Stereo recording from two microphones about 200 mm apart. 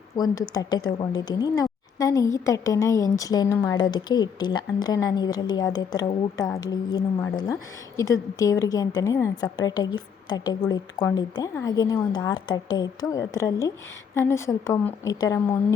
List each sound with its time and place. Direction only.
0.5 s a woman's voice: 20° left (ahead or behind)